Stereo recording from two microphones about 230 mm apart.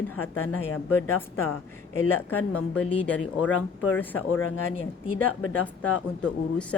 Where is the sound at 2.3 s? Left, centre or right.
Left.